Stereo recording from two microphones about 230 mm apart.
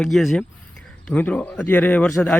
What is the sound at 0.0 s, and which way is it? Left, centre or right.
A man's voice, centre.